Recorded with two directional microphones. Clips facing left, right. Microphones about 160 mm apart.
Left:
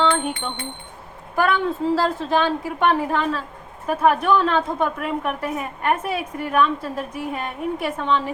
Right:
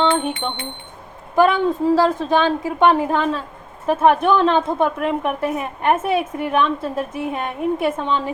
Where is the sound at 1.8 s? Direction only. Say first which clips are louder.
Right 5 dB; 15° right (ahead or behind).